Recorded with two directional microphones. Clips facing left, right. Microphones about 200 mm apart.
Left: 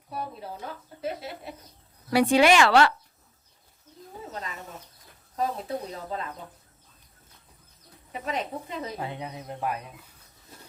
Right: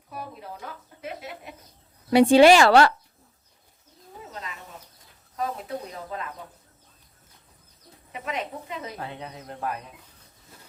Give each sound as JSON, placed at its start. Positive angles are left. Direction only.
{"t": 0.1, "sound": "speech", "side_deg": 30}
{"t": 2.0, "sound": "speech", "side_deg": -25}
{"t": 5.4, "sound": "speech", "side_deg": 30}
{"t": 8.1, "sound": "speech", "side_deg": 35}
{"t": 9.0, "sound": "speech", "side_deg": 15}